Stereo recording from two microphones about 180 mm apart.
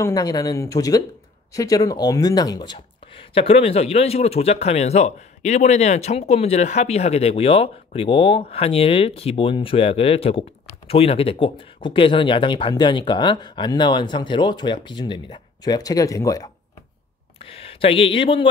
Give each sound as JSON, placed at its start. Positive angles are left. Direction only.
{"t": 0.0, "sound": "speech", "side_deg": 20}
{"t": 17.5, "sound": "speech", "side_deg": 30}